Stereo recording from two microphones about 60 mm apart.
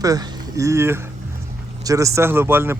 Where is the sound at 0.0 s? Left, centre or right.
Right.